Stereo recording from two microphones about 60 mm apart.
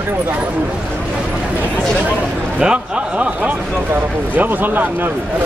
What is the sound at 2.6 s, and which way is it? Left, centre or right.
Speech, centre.